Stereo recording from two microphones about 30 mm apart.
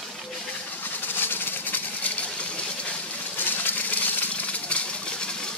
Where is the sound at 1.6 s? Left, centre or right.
Left.